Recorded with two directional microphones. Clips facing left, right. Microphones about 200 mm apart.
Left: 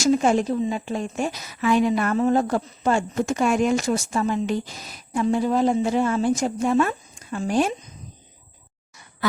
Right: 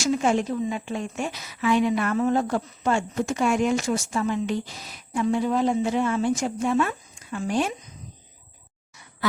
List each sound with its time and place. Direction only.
0.0 s a woman's voice: 40° left (ahead or behind)